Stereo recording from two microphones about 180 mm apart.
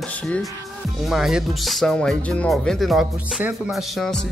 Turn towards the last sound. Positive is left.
turn(degrees=0)  # may be behind; listen again after turning